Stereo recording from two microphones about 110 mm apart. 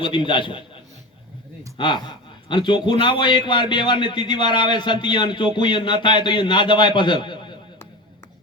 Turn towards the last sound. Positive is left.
turn(degrees=45)  # may be behind; listen again after turning